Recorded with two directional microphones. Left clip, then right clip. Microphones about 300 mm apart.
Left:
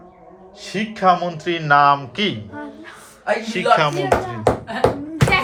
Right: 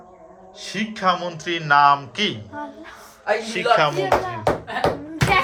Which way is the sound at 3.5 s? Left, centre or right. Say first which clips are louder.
Left 2 dB; centre.